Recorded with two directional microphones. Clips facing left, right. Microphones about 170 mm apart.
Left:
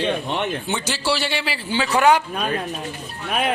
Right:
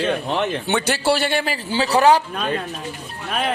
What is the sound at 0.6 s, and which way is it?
A man's voice, 60° right (ahead or behind).